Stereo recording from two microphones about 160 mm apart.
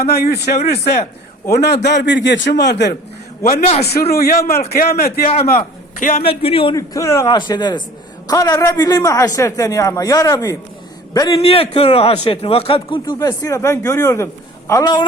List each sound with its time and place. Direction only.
0.0 s speech: 80° left
1.5 s a man's voice: 90° left
3.4 s a man's voice: 65° left (ahead or behind)
3.8 s a man's voice: 80° left
6.0 s a man's voice: 55° left (ahead or behind)
6.2 s a man's voice: 35° left (ahead or behind)
6.7 s a man's voice: 20° left (ahead or behind)
11.3 s a man's voice: 40° left (ahead or behind)